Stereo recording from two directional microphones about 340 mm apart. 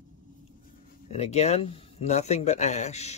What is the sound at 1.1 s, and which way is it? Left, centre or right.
Speech, centre.